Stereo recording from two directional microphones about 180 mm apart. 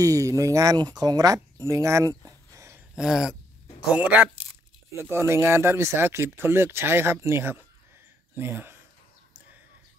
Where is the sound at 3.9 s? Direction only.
10° right (ahead or behind).